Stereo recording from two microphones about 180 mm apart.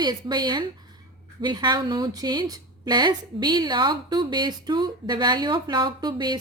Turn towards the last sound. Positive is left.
turn(degrees=-25)  # may be behind; listen again after turning